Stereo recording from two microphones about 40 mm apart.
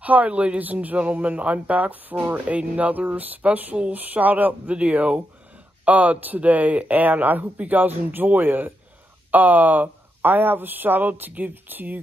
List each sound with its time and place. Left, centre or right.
0.0 s speech: right
4.7 s speech: right